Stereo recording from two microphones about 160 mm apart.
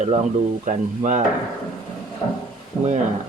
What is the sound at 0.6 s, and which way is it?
Coin, 50° right (ahead or behind).